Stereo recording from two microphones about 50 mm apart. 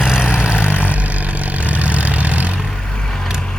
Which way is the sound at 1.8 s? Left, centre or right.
Right.